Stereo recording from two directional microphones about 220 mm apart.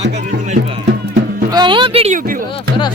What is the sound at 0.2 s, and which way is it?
Music, 30° right (ahead or behind).